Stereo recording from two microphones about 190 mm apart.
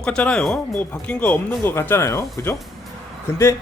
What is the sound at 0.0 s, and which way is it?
A man's voice, 5° left (ahead or behind).